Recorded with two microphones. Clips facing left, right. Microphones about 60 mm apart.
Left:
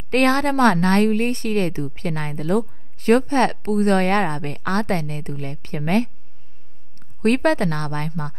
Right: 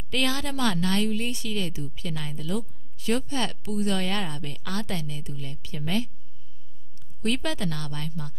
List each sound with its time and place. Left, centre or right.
0.1 s a woman's voice: left
7.2 s a woman's voice: left